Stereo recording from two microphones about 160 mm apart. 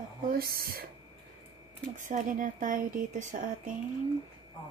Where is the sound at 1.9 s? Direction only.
55° right (ahead or behind).